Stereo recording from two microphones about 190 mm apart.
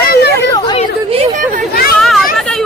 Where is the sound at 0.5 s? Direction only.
20° left (ahead or behind).